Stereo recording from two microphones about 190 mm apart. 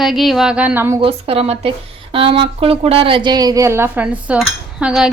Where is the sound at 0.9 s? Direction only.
30° right (ahead or behind).